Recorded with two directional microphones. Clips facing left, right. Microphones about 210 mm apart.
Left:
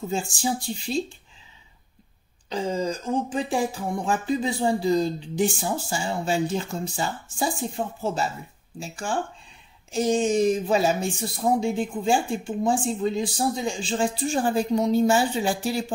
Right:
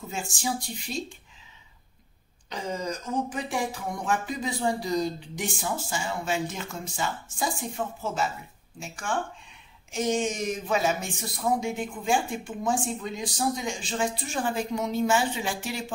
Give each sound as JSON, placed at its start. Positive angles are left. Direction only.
{"t": 0.1, "sound": "speech", "side_deg": 30}
{"t": 2.5, "sound": "speech", "side_deg": 30}